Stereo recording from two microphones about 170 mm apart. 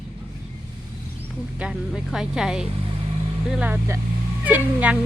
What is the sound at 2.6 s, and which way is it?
Vehicle, 35° right (ahead or behind).